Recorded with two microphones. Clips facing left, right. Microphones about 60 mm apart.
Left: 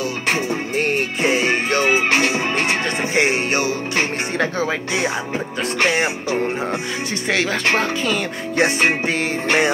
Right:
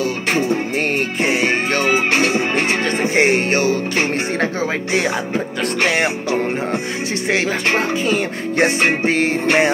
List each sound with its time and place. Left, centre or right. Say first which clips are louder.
0.7 s music: right 1 dB; right
2.8 s music: right 3 dB; right
5.6 s music: even; right
7.2 s speech: right 1 dB; right
8.1 s music: right 3 dB; right